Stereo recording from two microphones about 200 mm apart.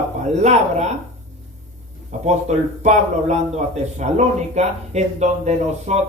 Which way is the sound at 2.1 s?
35° right (ahead or behind).